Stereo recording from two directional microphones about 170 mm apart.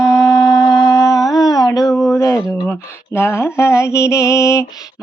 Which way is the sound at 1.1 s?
Centre (ahead or behind).